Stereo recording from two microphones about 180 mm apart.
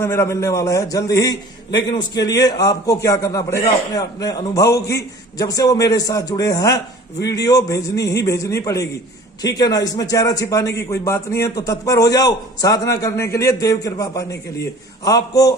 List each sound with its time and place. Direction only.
0.0 s a man's voice: 15° left (ahead or behind)